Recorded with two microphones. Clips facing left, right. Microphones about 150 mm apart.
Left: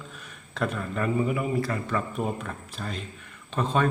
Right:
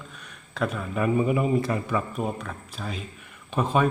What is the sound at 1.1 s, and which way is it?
Speech, 20° right (ahead or behind).